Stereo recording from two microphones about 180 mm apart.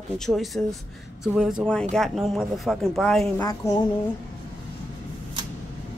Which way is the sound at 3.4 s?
20° left (ahead or behind).